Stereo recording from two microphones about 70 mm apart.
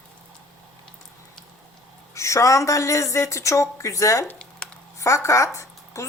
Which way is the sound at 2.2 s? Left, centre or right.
Left.